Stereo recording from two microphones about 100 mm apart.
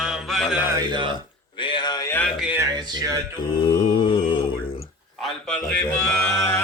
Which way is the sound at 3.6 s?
60° left (ahead or behind).